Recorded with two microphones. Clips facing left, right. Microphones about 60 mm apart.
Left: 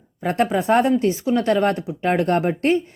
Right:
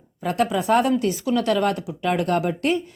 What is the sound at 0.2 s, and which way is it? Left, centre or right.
Speech, left.